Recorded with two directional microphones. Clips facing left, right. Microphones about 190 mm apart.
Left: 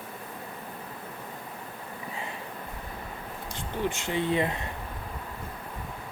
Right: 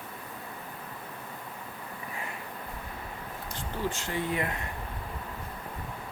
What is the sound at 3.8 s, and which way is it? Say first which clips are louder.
Speech: left 3 dB; 20° left (ahead or behind).